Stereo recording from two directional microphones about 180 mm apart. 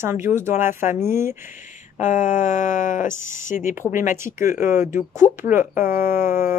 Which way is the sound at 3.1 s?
15° right (ahead or behind).